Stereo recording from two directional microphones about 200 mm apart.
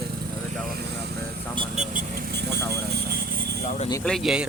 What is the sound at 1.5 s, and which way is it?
Speech, 35° right (ahead or behind).